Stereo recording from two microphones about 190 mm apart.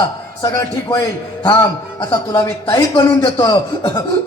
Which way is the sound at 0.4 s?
20° left (ahead or behind).